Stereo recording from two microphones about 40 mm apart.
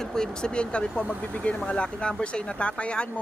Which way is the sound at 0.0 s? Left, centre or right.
Centre.